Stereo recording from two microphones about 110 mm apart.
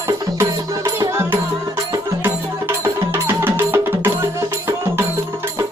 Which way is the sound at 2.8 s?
20° right (ahead or behind).